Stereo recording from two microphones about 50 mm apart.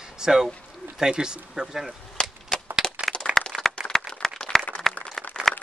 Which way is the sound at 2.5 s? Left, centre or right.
Centre.